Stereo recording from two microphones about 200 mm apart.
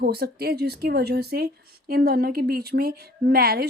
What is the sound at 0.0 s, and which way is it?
A woman's voice, 50° right (ahead or behind).